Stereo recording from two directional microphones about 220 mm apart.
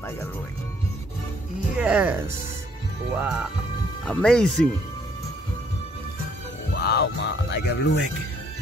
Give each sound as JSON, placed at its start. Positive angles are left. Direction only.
{"t": 1.8, "sound": "speech", "side_deg": -5}
{"t": 3.2, "sound": "speech", "side_deg": -5}
{"t": 6.9, "sound": "speech", "side_deg": 50}